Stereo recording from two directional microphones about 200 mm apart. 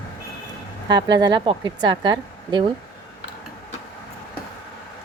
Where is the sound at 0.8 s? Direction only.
20° right (ahead or behind).